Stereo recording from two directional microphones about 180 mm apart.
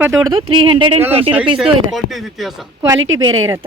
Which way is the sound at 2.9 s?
90° right.